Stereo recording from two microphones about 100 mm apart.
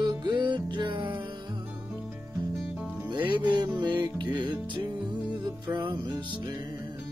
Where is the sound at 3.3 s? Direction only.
50° right (ahead or behind).